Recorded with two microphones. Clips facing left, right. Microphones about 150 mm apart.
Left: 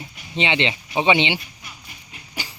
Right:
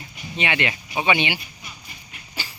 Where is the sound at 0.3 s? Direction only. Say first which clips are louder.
Left 3 dB; 25° left (ahead or behind).